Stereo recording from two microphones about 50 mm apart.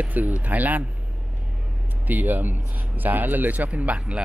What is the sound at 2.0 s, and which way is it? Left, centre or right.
Speech, right.